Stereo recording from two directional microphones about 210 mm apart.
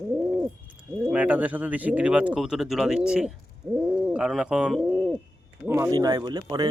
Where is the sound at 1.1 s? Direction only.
5° right (ahead or behind).